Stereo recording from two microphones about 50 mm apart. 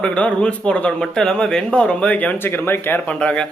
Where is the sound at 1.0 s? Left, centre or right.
Centre; by 2.4 s left.